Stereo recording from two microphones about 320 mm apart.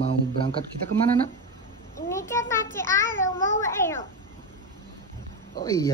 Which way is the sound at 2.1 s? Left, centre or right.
Centre.